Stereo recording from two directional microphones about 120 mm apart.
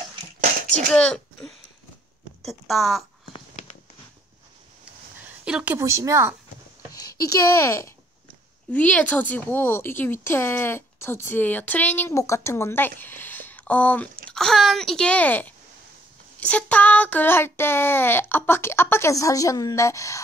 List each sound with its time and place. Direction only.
0.8 s speech: 5° left (ahead or behind)
5.4 s a sound: 10° right (ahead or behind)
5.8 s speech: 25° right (ahead or behind)
6.9 s speech: 30° left (ahead or behind)
8.7 s speech: 10° left (ahead or behind)
16.3 s child singing: 10° left (ahead or behind); by 20.2 s 25° left (ahead or behind)